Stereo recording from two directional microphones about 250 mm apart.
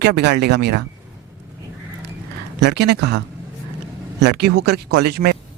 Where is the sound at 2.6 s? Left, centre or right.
Right.